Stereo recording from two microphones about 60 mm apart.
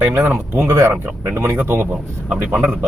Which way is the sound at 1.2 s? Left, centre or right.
Right.